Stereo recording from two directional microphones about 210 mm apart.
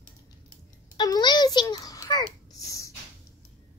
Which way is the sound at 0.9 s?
20° left (ahead or behind).